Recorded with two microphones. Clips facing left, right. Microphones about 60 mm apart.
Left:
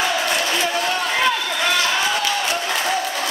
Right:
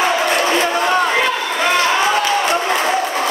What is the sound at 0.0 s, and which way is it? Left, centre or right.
Crowd, right.